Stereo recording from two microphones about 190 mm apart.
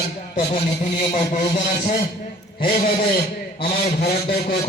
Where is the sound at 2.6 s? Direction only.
50° left (ahead or behind).